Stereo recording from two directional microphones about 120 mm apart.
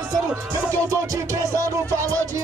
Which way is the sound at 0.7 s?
25° right (ahead or behind).